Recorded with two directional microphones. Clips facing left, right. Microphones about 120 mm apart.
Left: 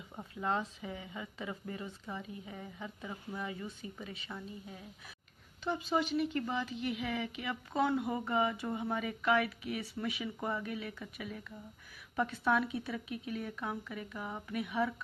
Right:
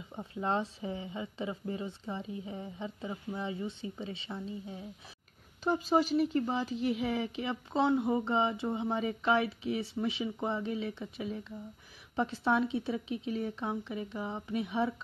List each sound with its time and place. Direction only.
0.3 s speech: 30° right (ahead or behind)
5.6 s speech: 40° right (ahead or behind)